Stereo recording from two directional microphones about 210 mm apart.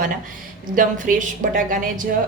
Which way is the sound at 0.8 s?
40° right (ahead or behind).